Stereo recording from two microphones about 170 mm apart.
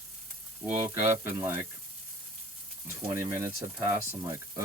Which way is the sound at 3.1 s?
15° right (ahead or behind).